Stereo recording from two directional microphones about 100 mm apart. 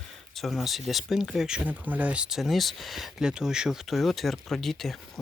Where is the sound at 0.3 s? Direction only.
Centre (ahead or behind).